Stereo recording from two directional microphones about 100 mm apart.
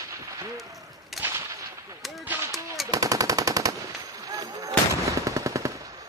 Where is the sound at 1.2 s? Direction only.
25° right (ahead or behind).